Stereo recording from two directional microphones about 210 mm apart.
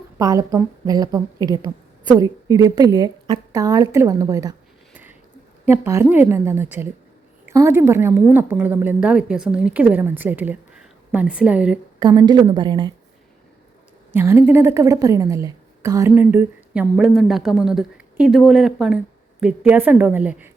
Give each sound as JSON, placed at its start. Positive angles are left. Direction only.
{"t": 0.2, "sound": "a woman's voice", "side_deg": -15}
{"t": 5.6, "sound": "a woman's voice", "side_deg": -10}
{"t": 11.9, "sound": "a woman's voice", "side_deg": -20}
{"t": 14.1, "sound": "a woman's voice", "side_deg": -10}